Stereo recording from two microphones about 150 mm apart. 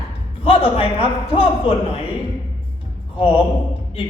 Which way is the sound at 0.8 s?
40° left (ahead or behind).